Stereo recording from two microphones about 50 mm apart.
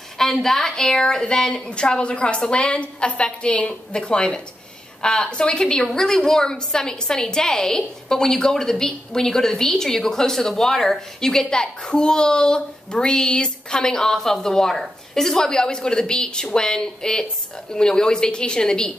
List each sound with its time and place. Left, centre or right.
0.2 s a woman's voice: centre